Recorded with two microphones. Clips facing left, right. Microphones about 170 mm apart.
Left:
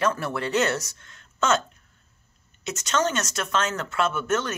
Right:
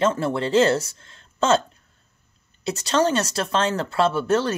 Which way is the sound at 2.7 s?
30° right (ahead or behind).